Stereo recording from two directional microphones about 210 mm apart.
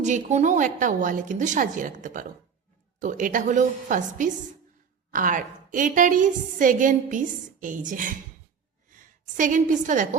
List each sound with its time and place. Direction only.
0.0 s a woman's voice: 35° right (ahead or behind)